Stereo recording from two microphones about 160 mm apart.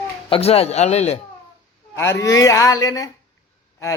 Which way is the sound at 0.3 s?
35° left (ahead or behind).